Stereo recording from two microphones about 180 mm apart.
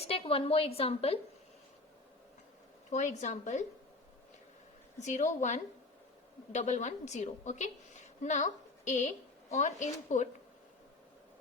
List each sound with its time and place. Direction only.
0.1 s a woman's voice: 30° left (ahead or behind)
2.9 s a woman's voice: 40° left (ahead or behind)
4.9 s a woman's voice: 40° left (ahead or behind)